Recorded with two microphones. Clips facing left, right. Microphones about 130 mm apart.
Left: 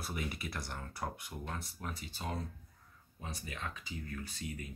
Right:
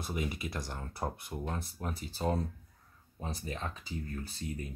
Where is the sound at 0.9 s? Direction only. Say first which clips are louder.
Right 5 dB; 30° right (ahead or behind).